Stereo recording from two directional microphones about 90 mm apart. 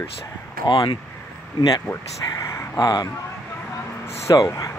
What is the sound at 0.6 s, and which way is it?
Speech, 60° left (ahead or behind).